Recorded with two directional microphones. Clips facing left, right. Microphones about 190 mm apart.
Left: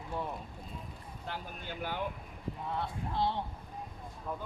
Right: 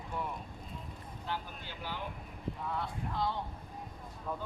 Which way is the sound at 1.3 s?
50° left (ahead or behind).